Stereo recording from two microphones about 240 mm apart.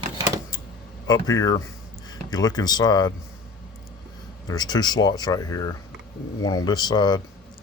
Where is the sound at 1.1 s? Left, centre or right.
Centre.